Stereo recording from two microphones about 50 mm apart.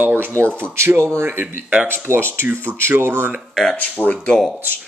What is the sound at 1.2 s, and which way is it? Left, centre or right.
Speech, right.